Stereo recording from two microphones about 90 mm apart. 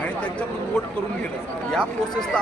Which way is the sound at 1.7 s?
5° left (ahead or behind).